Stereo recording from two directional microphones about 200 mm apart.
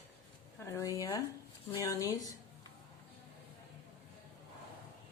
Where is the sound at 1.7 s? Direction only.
15° left (ahead or behind).